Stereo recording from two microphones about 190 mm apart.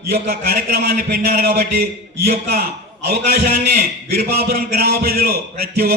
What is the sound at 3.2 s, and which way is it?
A man's voice, 50° right (ahead or behind).